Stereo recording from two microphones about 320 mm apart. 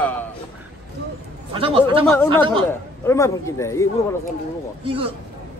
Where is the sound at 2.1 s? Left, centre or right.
Centre.